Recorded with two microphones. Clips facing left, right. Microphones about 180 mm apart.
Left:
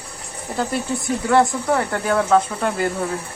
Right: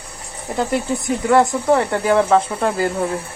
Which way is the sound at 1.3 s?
25° right (ahead or behind).